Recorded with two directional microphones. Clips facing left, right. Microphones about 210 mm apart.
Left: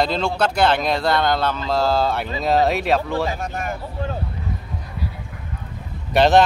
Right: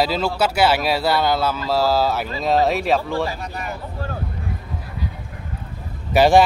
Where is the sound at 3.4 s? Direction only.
50° left (ahead or behind).